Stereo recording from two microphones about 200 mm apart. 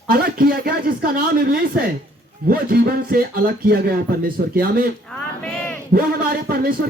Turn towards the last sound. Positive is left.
turn(degrees=-50)  # may be behind; listen again after turning